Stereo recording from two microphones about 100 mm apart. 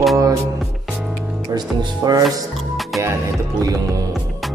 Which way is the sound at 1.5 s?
40° right (ahead or behind).